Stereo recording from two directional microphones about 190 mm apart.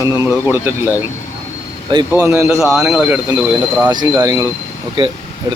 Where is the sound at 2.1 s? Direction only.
15° right (ahead or behind).